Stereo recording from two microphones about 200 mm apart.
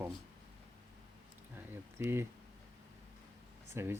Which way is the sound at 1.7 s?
10° right (ahead or behind).